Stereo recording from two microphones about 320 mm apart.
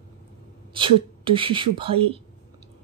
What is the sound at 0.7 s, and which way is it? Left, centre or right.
Speech, centre.